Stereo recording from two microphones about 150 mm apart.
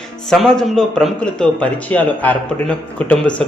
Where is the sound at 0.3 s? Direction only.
5° left (ahead or behind).